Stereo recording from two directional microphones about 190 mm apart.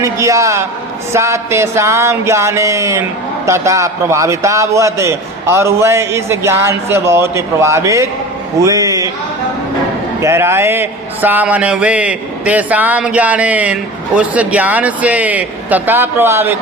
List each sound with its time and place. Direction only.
0.0 s a man's voice: 15° right (ahead or behind)
10.2 s a man's voice: 15° right (ahead or behind)